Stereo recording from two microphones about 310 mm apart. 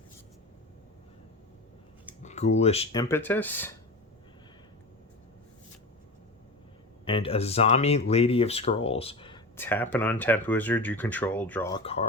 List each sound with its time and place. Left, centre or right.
2.2 s speech: left; by 3.7 s centre
7.0 s speech: centre